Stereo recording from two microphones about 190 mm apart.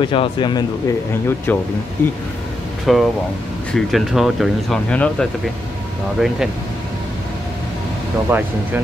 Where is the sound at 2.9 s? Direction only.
Centre (ahead or behind).